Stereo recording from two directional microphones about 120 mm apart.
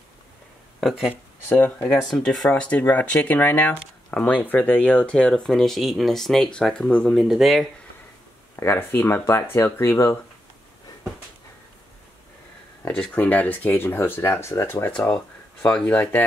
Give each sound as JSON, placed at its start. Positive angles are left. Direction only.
{"t": 0.7, "sound": "speech", "side_deg": 0}
{"t": 1.5, "sound": "speech", "side_deg": 15}
{"t": 2.0, "sound": "speech", "side_deg": 0}
{"t": 8.5, "sound": "speech", "side_deg": 20}
{"t": 12.9, "sound": "speech", "side_deg": 10}
{"t": 15.0, "sound": "speech", "side_deg": 5}